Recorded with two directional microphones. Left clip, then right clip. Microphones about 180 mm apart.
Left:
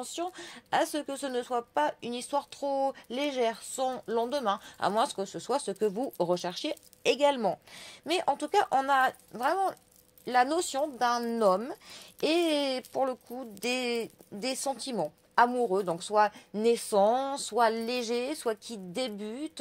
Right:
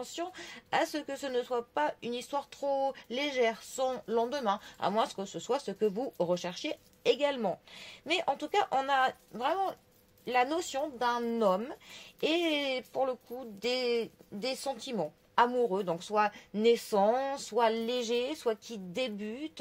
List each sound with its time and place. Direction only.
0.0 s speech: 35° left (ahead or behind)